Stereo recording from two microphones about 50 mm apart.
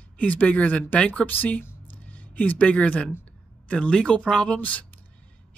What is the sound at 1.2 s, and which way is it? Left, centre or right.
Speech, left.